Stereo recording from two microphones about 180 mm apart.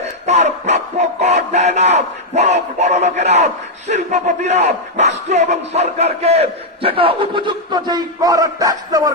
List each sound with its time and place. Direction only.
0.3 s speech: 40° right (ahead or behind); by 9.1 s 20° right (ahead or behind)